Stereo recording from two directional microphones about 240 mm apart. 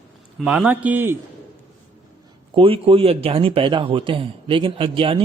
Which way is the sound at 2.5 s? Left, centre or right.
Right.